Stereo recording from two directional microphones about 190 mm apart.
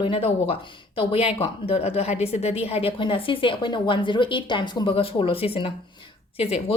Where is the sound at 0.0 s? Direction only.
30° left (ahead or behind).